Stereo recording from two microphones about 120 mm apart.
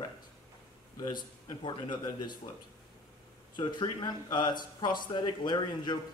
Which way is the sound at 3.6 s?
40° left (ahead or behind).